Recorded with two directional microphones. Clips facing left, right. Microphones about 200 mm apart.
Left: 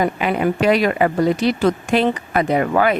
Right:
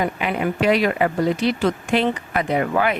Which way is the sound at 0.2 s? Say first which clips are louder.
Left 3 dB; 40° left (ahead or behind).